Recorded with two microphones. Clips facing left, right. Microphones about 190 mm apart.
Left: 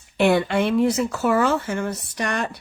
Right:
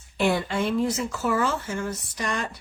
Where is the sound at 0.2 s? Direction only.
65° left (ahead or behind).